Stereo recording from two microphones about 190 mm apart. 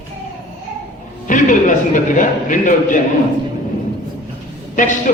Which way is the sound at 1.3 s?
45° left (ahead or behind).